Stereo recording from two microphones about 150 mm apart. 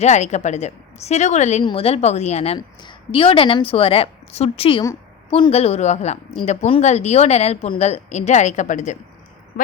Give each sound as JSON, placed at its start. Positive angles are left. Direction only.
{"t": 0.0, "sound": "a woman's voice", "side_deg": 50}
{"t": 2.6, "sound": "a woman's voice", "side_deg": 35}